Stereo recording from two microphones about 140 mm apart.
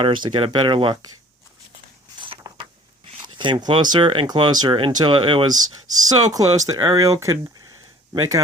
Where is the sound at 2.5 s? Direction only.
25° right (ahead or behind).